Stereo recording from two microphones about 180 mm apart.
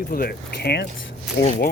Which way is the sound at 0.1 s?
55° left (ahead or behind).